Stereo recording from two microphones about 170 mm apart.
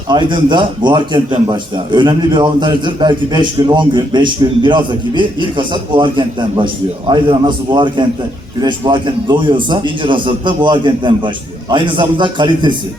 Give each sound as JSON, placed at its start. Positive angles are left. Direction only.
{"t": 0.1, "sound": "a man's voice", "side_deg": -25}